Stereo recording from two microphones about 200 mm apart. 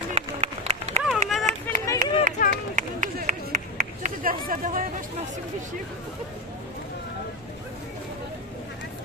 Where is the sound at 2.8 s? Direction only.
40° right (ahead or behind).